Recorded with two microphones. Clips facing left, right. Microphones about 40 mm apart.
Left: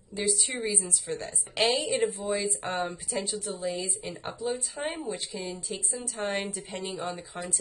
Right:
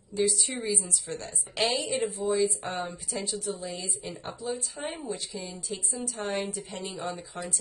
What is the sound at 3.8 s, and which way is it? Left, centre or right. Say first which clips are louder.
A woman's voice: left 2 dB; left.